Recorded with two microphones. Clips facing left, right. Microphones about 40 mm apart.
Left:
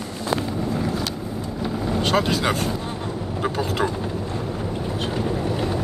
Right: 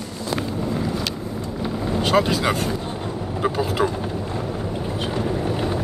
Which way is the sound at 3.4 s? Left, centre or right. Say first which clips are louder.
Right 2 dB; centre.